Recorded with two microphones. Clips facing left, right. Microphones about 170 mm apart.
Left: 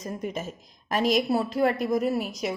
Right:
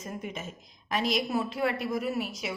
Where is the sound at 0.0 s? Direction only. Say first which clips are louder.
Left 5 dB; 40° left (ahead or behind).